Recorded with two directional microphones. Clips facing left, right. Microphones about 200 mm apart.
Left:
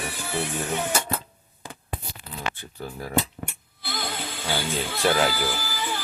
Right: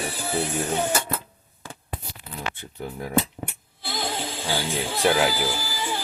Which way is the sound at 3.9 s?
30° right (ahead or behind).